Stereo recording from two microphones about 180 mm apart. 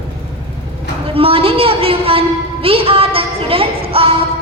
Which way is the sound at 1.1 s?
30° right (ahead or behind).